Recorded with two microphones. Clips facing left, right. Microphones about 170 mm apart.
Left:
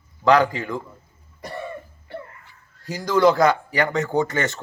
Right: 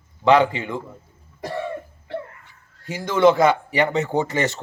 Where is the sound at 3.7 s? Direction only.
25° right (ahead or behind).